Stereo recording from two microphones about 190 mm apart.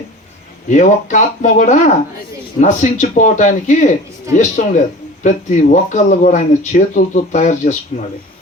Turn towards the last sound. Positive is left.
turn(degrees=40)  # may be behind; listen again after turning